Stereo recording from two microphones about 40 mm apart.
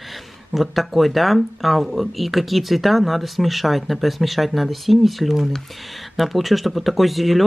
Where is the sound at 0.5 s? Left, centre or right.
Centre.